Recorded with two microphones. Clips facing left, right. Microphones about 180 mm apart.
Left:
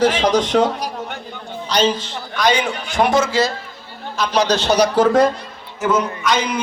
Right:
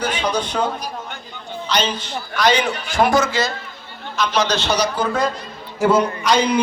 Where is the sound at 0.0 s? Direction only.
90° left.